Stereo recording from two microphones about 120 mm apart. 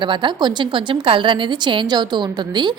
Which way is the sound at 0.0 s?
40° right (ahead or behind).